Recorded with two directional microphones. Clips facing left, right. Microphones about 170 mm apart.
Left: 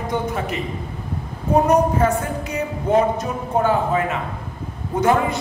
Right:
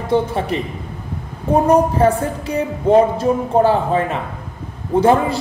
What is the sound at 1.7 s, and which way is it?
A man's voice, 30° right (ahead or behind).